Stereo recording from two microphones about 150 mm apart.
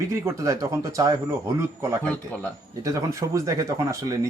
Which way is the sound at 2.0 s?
10° left (ahead or behind).